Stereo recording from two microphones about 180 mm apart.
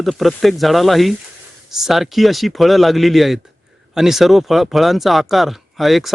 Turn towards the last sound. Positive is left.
turn(degrees=0)  # may be behind; listen again after turning